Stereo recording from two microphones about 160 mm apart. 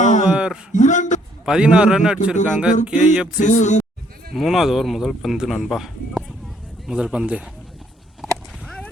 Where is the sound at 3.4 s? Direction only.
50° left (ahead or behind).